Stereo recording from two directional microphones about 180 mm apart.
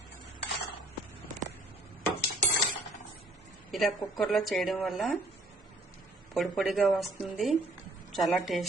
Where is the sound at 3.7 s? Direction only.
Centre (ahead or behind).